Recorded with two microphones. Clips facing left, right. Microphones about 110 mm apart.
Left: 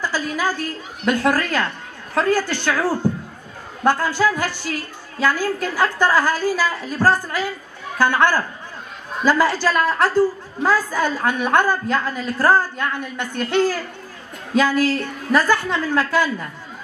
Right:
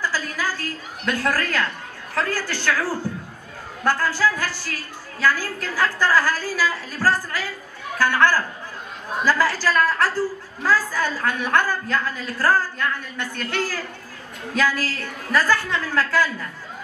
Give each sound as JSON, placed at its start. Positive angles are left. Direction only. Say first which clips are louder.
{"t": 0.0, "sound": "a woman's voice", "louder": "left 4 dB", "side_deg": 20}